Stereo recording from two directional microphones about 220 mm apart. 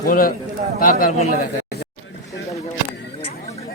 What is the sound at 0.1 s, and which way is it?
A man's voice, 40° left (ahead or behind).